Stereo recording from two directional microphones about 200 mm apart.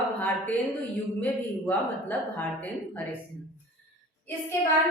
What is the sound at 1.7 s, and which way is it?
Speech, 10° left (ahead or behind).